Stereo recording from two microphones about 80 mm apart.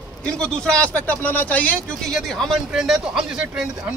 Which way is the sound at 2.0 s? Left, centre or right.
Centre.